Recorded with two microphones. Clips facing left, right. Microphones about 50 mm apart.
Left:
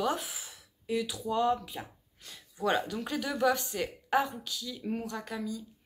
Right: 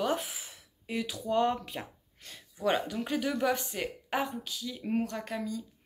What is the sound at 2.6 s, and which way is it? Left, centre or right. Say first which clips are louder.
Speech: even; right.